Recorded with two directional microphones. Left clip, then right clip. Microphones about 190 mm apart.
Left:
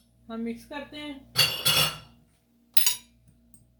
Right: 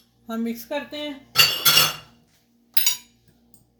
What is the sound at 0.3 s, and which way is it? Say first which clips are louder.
Speech: right 7 dB; 55° right (ahead or behind).